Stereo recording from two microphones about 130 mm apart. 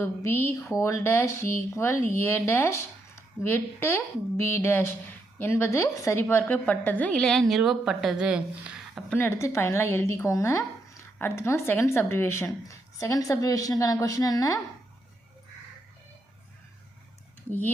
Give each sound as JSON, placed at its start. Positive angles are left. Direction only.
{"t": 0.0, "sound": "speech", "side_deg": 20}
{"t": 9.1, "sound": "speech", "side_deg": 15}